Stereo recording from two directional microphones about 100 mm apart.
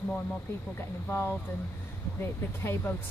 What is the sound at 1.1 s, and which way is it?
A woman's voice, 20° left (ahead or behind).